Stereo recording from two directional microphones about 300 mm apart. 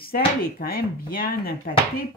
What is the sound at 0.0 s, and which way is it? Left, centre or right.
Speech, left.